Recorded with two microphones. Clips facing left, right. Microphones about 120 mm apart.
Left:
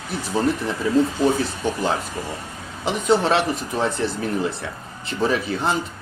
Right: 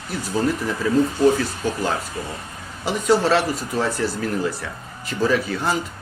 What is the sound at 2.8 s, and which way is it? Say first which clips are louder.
Speech: right 1 dB; 20° left (ahead or behind).